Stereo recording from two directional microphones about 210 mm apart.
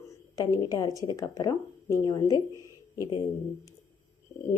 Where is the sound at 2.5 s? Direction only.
15° right (ahead or behind).